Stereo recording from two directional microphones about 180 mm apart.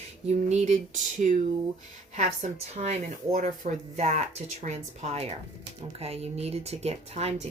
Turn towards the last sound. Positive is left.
turn(degrees=-35)  # may be behind; listen again after turning